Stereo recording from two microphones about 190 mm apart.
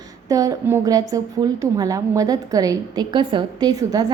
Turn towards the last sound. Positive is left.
turn(degrees=-20)  # may be behind; listen again after turning